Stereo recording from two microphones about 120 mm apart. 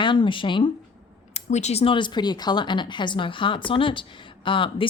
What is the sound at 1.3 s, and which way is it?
Speech, 70° left (ahead or behind).